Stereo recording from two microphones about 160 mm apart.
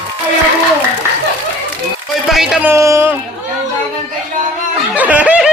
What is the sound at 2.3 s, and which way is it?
Speech, 5° right (ahead or behind).